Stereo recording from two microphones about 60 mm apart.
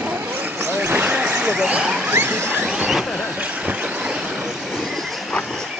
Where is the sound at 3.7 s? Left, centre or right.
Right.